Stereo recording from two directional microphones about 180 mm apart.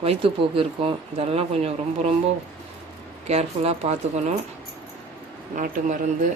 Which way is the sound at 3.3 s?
35° right (ahead or behind).